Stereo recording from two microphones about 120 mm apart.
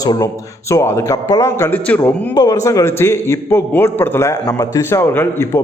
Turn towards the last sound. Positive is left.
turn(degrees=20)  # may be behind; listen again after turning